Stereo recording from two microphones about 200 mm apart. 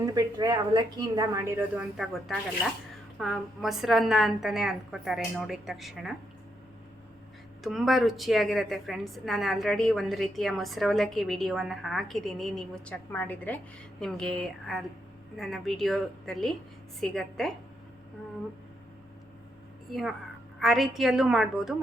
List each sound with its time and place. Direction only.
0.0 s a woman's voice: 20° right (ahead or behind); by 6.1 s centre (ahead or behind)
7.6 s a woman's voice: centre (ahead or behind)
19.9 s a woman's voice: centre (ahead or behind)